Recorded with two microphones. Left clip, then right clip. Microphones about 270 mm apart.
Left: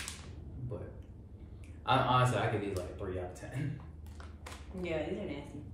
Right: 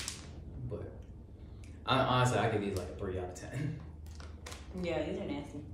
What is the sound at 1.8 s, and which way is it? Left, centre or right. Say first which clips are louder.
Speech: left 1 dB; centre.